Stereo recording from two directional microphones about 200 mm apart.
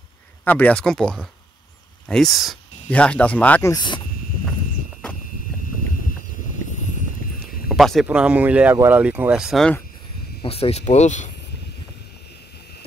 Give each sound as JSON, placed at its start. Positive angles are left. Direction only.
{"t": 0.5, "sound": "speech", "side_deg": 10}
{"t": 3.7, "sound": "speech", "side_deg": 20}
{"t": 7.6, "sound": "speech", "side_deg": 0}
{"t": 10.4, "sound": "speech", "side_deg": 30}